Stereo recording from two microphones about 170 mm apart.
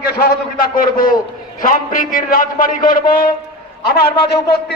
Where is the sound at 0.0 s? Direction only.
60° left (ahead or behind).